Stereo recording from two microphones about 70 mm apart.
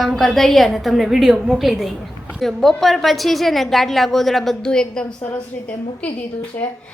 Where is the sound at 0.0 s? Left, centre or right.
Centre.